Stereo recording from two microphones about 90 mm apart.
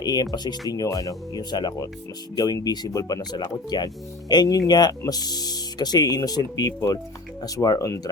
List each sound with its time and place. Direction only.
0.0 s speech: 45° left (ahead or behind)